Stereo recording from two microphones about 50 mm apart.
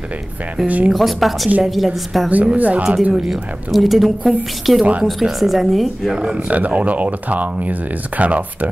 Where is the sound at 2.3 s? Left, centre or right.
Right.